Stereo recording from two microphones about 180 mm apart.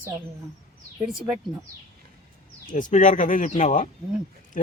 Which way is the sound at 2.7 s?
45° left (ahead or behind).